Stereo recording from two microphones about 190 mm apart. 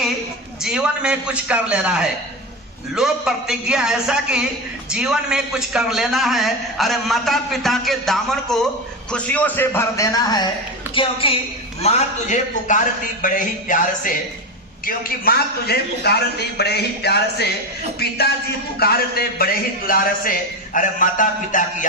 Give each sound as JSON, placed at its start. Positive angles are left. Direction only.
{"t": 0.6, "sound": "a man's voice", "side_deg": -5}